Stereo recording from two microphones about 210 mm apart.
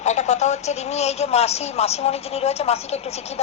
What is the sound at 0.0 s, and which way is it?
Speech, 35° left (ahead or behind).